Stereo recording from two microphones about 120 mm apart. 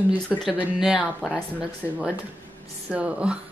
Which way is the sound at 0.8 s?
5° right (ahead or behind).